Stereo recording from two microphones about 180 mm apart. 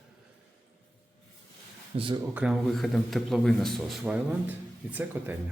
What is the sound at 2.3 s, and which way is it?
A man's voice, 5° right (ahead or behind).